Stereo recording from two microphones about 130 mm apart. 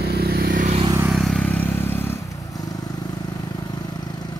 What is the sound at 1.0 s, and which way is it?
Vehicle, centre (ahead or behind).